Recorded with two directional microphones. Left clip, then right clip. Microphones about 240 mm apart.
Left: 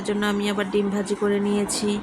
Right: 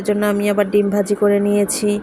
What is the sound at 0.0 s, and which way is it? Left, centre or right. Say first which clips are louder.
A woman's voice: right 7 dB; centre.